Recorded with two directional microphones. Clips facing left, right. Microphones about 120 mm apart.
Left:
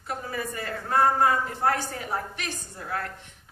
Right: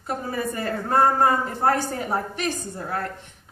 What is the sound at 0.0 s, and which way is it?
A woman's voice, 40° right (ahead or behind).